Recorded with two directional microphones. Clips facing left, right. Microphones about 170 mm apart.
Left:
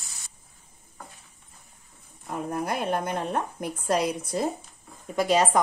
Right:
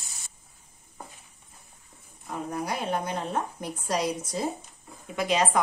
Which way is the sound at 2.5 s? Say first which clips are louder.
Left 2 dB; 50° left (ahead or behind).